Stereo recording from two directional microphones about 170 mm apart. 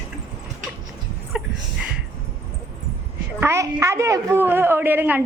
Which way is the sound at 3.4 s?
15° right (ahead or behind).